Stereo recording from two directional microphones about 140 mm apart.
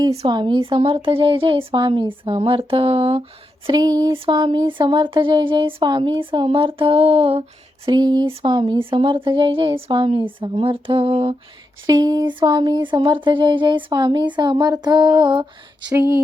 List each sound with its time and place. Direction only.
0.3 s speech: 35° right (ahead or behind)
3.7 s speech: 30° right (ahead or behind)
7.9 s speech: 30° right (ahead or behind)
11.9 s speech: 30° right (ahead or behind)
15.9 s speech: 20° right (ahead or behind)